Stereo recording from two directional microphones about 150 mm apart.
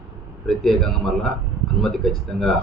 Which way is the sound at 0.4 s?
Centre (ahead or behind).